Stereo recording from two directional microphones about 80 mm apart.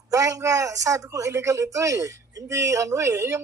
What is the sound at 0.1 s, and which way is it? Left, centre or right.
A woman's voice, right.